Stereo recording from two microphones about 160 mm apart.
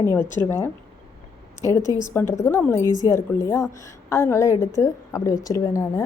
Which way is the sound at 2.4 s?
15° left (ahead or behind).